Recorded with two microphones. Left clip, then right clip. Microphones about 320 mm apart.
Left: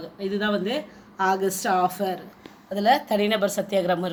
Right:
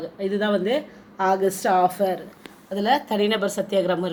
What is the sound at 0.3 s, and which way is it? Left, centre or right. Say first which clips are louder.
Speech: right 3 dB; centre.